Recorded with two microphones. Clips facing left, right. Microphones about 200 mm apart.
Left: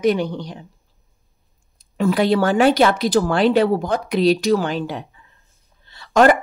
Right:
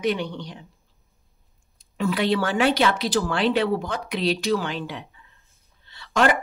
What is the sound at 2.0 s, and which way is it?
Speech, 45° left (ahead or behind).